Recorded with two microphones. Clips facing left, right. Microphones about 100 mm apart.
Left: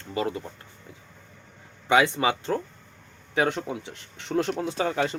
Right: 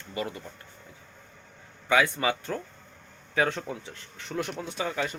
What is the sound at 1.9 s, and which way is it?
Speech, 25° left (ahead or behind).